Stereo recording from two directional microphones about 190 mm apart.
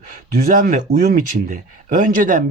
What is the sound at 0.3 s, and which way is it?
Speech, 45° right (ahead or behind).